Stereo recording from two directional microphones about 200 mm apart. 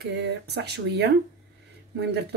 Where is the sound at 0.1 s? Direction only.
55° right (ahead or behind).